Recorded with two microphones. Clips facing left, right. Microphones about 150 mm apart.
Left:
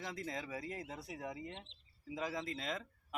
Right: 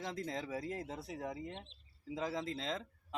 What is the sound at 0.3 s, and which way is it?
Speech, centre (ahead or behind).